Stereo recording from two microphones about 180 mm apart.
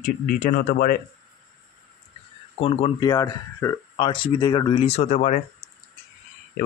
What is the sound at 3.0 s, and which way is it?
Speech, 20° left (ahead or behind).